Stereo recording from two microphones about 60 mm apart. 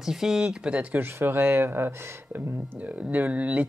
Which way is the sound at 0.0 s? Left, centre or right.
Centre.